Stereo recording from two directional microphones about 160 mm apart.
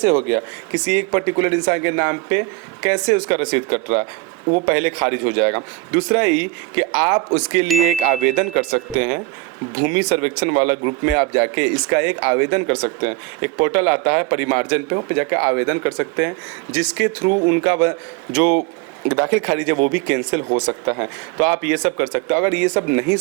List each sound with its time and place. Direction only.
0.3 s speech: 15° right (ahead or behind)
20.5 s speech: 25° right (ahead or behind)